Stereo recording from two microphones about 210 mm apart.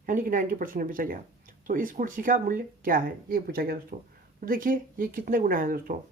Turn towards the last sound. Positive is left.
turn(degrees=-45)  # may be behind; listen again after turning